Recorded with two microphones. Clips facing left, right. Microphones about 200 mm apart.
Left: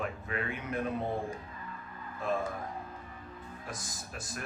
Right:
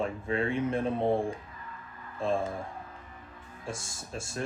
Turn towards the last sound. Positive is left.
turn(degrees=-25)  # may be behind; listen again after turning